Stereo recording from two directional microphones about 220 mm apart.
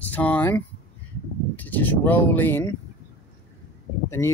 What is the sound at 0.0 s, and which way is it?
Speech, 5° left (ahead or behind).